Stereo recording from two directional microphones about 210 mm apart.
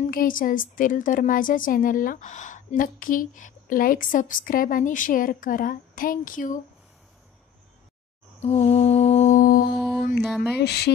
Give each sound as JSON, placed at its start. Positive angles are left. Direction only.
{"t": 0.1, "sound": "speech", "side_deg": 40}
{"t": 8.4, "sound": "speech", "side_deg": 30}
{"t": 9.8, "sound": "mantra", "side_deg": 0}
{"t": 10.2, "sound": "a sound", "side_deg": -5}
{"t": 10.6, "sound": "speech", "side_deg": 50}